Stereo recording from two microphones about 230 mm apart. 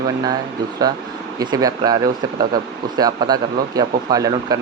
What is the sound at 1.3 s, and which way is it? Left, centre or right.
Speech, centre.